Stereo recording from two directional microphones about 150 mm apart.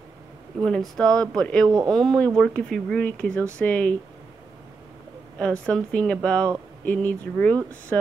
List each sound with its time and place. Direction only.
0.6 s speech: 5° left (ahead or behind)
5.7 s speech: 10° left (ahead or behind)